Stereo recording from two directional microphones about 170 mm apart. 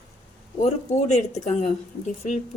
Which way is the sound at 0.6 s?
40° left (ahead or behind).